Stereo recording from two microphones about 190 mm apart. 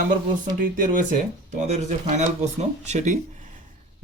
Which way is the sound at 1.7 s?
40° right (ahead or behind).